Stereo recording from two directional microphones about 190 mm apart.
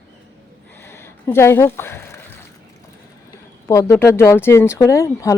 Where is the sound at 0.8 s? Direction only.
15° left (ahead or behind).